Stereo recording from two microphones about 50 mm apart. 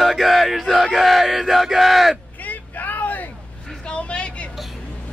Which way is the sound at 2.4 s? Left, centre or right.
Left.